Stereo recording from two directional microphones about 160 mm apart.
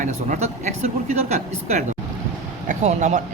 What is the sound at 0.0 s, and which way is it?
Speech, 50° right (ahead or behind).